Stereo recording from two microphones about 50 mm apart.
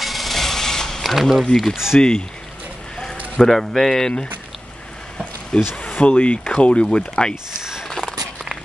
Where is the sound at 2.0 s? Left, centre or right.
Centre.